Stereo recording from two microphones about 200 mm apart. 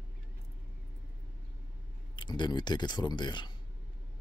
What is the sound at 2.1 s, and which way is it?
Speech, 25° left (ahead or behind).